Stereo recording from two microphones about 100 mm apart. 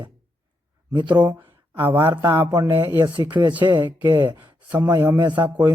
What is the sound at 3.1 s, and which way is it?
A man's voice, 50° right (ahead or behind).